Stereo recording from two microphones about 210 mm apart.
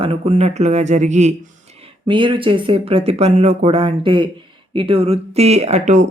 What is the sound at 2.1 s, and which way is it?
Speech, 25° right (ahead or behind).